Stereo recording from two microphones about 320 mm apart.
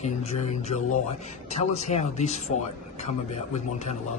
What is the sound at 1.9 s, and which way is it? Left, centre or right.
Speech, left.